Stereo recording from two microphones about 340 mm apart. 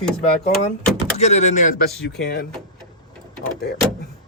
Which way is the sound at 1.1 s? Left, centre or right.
Centre.